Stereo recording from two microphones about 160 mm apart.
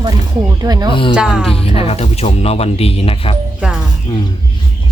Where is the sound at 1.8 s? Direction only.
40° left (ahead or behind).